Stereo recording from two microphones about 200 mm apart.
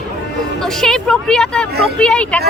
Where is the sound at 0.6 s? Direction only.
5° left (ahead or behind).